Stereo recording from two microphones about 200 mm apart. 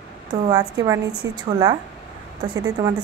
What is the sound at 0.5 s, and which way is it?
A woman's voice, 20° right (ahead or behind).